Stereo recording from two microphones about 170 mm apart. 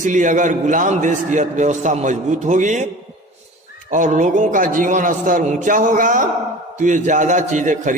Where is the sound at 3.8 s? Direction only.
50° right (ahead or behind).